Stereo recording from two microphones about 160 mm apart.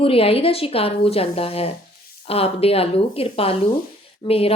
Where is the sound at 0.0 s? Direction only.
35° left (ahead or behind).